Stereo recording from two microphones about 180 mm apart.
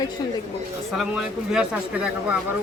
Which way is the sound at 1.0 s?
5° right (ahead or behind).